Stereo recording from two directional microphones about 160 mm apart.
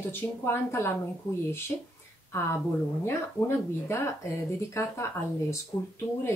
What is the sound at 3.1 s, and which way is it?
A woman's voice, 15° left (ahead or behind).